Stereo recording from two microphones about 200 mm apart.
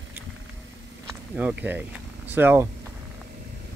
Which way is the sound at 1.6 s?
10° right (ahead or behind).